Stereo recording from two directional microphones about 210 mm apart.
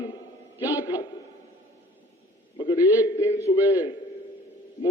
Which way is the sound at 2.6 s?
20° left (ahead or behind).